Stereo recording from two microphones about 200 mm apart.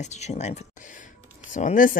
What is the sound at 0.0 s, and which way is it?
Speech, 35° left (ahead or behind).